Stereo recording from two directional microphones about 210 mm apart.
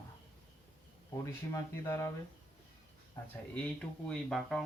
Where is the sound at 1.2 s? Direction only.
15° left (ahead or behind).